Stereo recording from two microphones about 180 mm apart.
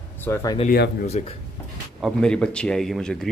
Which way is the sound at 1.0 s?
35° left (ahead or behind).